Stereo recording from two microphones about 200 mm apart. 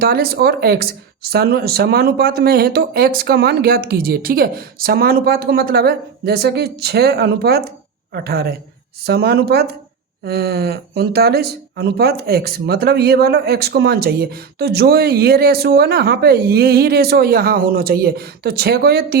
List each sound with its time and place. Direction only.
0.0 s speech: 50° right (ahead or behind)